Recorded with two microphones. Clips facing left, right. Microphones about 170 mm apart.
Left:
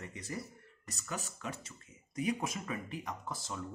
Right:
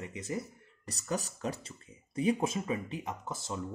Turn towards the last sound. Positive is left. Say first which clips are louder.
# right 3 dB
turn(degrees=-20)  # may be behind; listen again after turning